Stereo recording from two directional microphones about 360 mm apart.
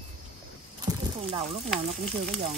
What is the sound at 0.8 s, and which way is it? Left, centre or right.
Snake, centre.